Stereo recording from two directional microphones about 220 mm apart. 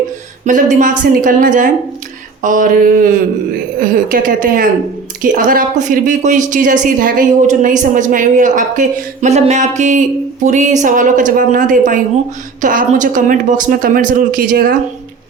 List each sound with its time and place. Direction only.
0.4 s a woman's voice: 35° right (ahead or behind)